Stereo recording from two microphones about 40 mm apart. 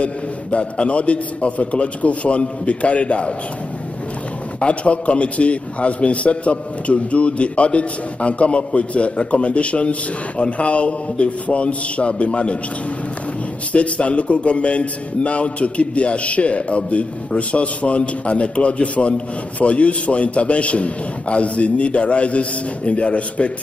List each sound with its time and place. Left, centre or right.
0.0 s a man's voice: left
4.6 s a man's voice: left
13.7 s a man's voice: left